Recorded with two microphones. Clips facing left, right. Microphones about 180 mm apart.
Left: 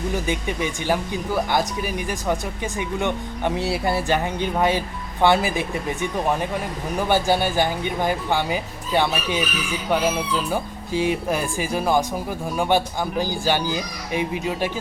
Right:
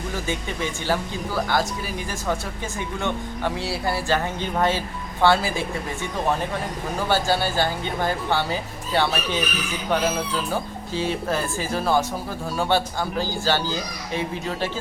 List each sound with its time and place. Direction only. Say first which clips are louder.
0.1 s speech: left 3 dB; 15° left (ahead or behind)
7.1 s speech: left 2 dB; 15° left (ahead or behind)